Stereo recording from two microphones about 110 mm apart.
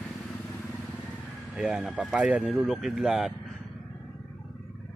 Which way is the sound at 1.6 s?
10° right (ahead or behind).